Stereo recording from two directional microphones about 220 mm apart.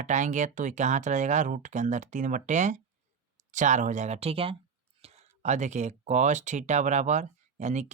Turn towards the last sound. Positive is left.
turn(degrees=-30)  # may be behind; listen again after turning